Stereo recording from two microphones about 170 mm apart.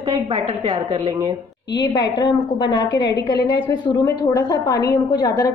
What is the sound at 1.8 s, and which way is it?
A woman's voice, 20° left (ahead or behind).